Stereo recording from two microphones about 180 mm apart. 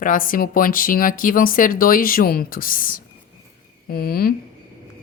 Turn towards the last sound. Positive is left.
turn(degrees=55)  # may be behind; listen again after turning